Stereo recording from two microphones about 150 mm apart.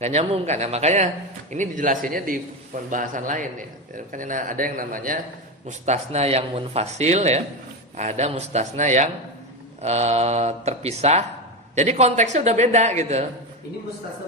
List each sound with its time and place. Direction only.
0.0 s speech: 45° right (ahead or behind)
1.5 s speech: 60° right (ahead or behind)
5.6 s speech: 50° right (ahead or behind)